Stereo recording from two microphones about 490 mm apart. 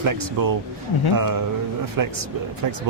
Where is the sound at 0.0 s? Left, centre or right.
Right.